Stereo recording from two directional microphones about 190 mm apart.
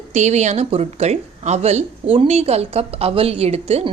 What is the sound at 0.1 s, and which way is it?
Speech, 40° right (ahead or behind).